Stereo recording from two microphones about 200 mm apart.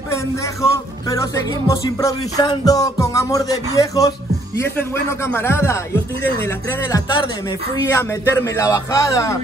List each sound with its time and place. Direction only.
1.1 s speech: 15° left (ahead or behind)
6.9 s a man's voice: 25° left (ahead or behind)